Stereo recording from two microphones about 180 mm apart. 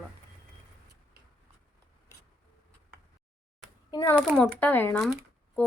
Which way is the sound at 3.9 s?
20° left (ahead or behind).